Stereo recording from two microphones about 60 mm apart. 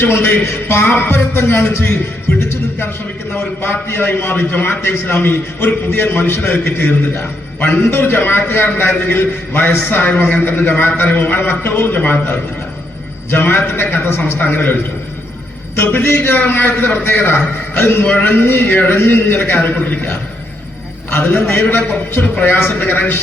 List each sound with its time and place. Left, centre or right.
0.0 s a man's voice: left
3.3 s a man's voice: left
15.8 s a man's voice: left
18.0 s a man's voice: left
21.1 s a man's voice: left
21.7 s a man's voice: left